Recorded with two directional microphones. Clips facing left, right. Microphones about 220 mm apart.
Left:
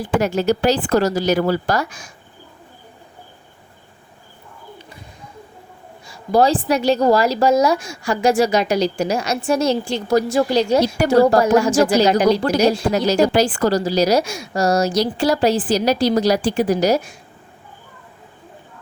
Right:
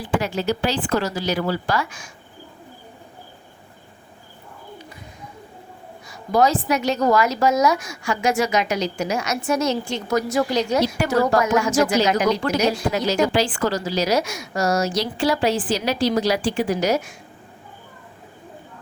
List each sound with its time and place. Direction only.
0.0 s a woman's voice: 45° left (ahead or behind)
6.1 s a woman's voice: 30° left (ahead or behind)